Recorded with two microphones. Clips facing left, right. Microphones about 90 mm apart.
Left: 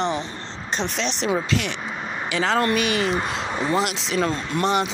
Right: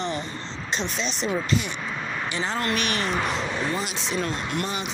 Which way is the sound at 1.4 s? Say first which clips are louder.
Left 1 dB; 85° left.